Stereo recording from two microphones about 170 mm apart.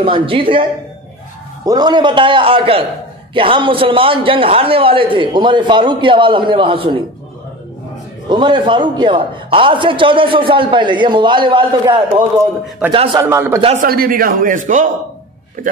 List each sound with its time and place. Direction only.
0.0 s a man's voice: 30° right (ahead or behind)
1.7 s a man's voice: 25° right (ahead or behind)
8.3 s a man's voice: 25° right (ahead or behind)
13.2 s speech: 15° right (ahead or behind)
13.7 s a man's voice: 60° right (ahead or behind)